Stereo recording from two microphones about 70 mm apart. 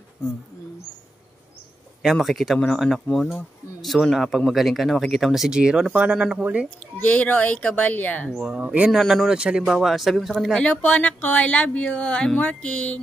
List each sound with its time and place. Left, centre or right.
2.1 s speech: centre; by 6.7 s right
7.0 s a woman's voice: left
8.5 s speech: centre
8.9 s speech: centre
9.3 s speech: centre
10.6 s a woman's voice: centre
11.9 s music: centre